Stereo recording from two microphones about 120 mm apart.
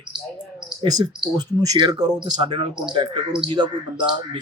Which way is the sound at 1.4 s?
35° right (ahead or behind).